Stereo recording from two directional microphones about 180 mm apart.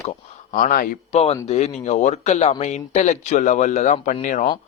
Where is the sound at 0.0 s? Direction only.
40° left (ahead or behind).